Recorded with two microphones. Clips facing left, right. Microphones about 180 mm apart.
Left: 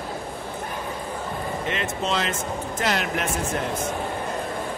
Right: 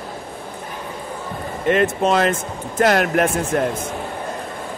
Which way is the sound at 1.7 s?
50° right (ahead or behind).